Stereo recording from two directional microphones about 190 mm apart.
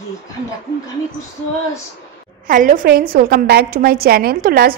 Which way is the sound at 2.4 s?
45° right (ahead or behind).